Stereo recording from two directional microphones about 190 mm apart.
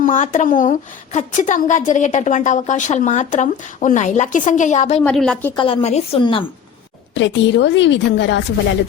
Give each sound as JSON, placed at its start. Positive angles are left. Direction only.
{"t": 0.0, "sound": "a woman's voice", "side_deg": 40}
{"t": 5.0, "sound": "a woman's voice", "side_deg": 5}
{"t": 5.5, "sound": "a woman's voice", "side_deg": 30}
{"t": 7.2, "sound": "a woman's voice", "side_deg": 70}